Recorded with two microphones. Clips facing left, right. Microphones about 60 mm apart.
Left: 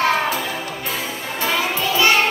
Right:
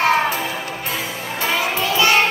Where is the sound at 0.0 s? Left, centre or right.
Right.